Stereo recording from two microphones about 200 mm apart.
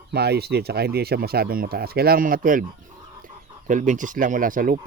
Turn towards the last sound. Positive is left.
turn(degrees=-45)  # may be behind; listen again after turning